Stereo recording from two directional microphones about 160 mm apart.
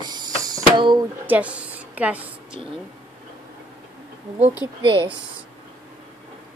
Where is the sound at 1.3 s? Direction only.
10° right (ahead or behind).